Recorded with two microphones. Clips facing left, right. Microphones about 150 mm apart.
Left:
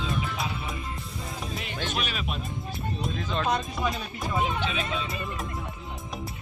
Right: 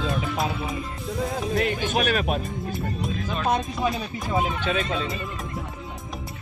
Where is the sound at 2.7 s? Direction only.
Centre (ahead or behind).